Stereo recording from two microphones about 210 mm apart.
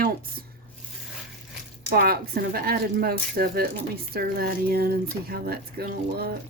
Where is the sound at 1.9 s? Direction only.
45° right (ahead or behind).